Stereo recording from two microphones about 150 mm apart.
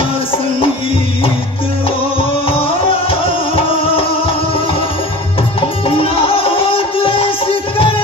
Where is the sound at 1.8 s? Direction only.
35° left (ahead or behind).